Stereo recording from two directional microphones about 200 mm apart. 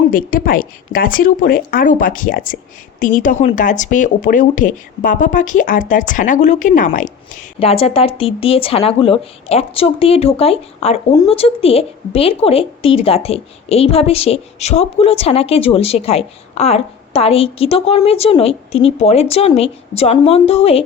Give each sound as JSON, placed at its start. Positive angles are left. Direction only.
{"t": 0.1, "sound": "a woman's voice", "side_deg": 45}